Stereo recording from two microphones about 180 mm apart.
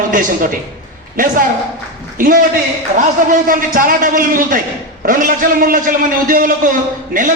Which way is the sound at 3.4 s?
50° right (ahead or behind).